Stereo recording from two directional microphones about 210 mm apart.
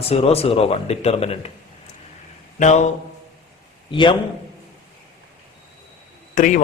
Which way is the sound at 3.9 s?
25° left (ahead or behind).